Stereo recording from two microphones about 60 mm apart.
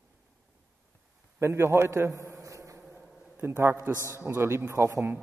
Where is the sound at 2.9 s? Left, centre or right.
Right.